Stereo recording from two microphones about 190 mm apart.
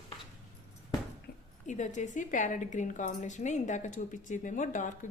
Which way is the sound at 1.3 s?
55° left (ahead or behind).